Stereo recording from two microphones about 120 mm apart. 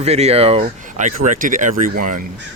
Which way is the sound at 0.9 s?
90° right.